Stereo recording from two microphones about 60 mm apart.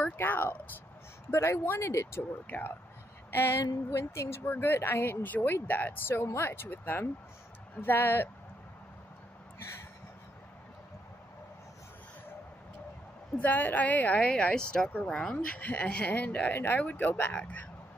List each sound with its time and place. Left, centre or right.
0.0 s speech: left
1.3 s speech: left
2.4 s speech: left
3.3 s a sound: left
3.5 s a sound: left
4.1 s speech: left
13.4 s a woman's voice: left